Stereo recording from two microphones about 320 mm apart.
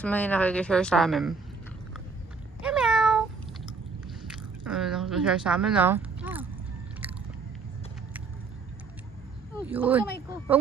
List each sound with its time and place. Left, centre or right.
0.0 s a woman's voice: centre
2.6 s cat: centre
4.3 s speech: centre
9.6 s a woman's voice: centre